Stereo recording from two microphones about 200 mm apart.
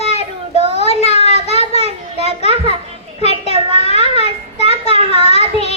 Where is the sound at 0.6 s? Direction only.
30° left (ahead or behind).